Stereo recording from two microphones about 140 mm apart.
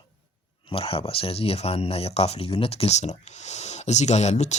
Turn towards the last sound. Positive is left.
turn(degrees=55)  # may be behind; listen again after turning